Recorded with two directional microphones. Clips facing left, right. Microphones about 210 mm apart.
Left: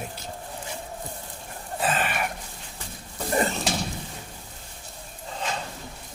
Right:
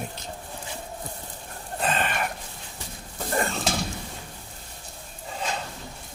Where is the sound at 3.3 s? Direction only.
20° left (ahead or behind).